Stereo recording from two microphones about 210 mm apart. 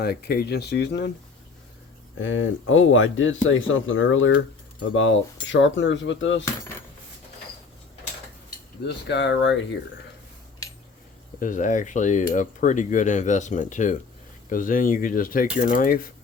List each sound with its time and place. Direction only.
0.0 s speech: 50° left (ahead or behind)
2.1 s speech: 65° left (ahead or behind)
9.0 s speech: 55° left (ahead or behind)
11.3 s speech: 40° left (ahead or behind)